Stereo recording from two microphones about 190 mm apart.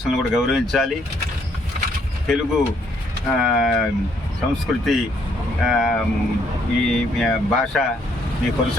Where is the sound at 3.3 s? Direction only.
Centre (ahead or behind).